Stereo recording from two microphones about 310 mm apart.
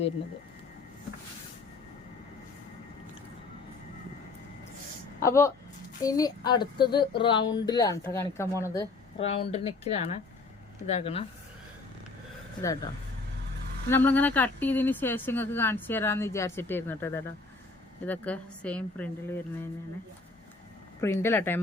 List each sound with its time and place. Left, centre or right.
5.2 s speech: centre
13.9 s speech: centre
21.0 s speech: centre